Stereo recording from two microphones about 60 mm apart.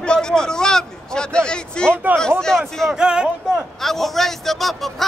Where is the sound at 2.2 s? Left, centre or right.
Centre.